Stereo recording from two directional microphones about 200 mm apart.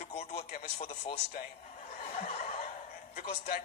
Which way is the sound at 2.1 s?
35° left (ahead or behind).